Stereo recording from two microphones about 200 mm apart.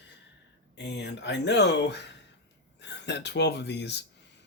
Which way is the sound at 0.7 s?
60° left (ahead or behind).